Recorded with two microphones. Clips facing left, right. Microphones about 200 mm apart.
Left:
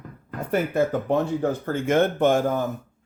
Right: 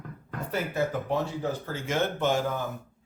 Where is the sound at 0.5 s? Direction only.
55° left (ahead or behind).